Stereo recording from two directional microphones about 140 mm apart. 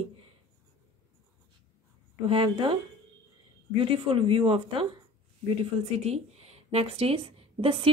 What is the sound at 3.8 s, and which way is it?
A woman's voice, 40° right (ahead or behind).